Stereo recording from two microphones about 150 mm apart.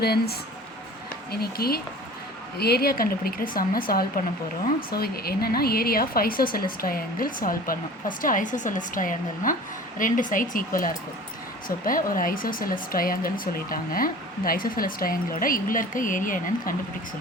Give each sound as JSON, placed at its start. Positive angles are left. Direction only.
{"t": 0.0, "sound": "speech", "side_deg": 90}
{"t": 4.9, "sound": "speech", "side_deg": 90}